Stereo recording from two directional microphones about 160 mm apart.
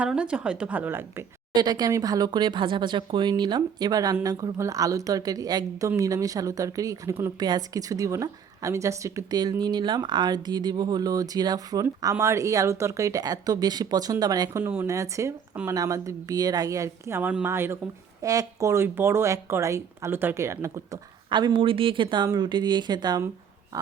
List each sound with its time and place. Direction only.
0.0 s speech: 5° right (ahead or behind)
1.5 s speech: 25° right (ahead or behind)
14.6 s speech: 15° right (ahead or behind)
23.7 s wild animals: 20° right (ahead or behind)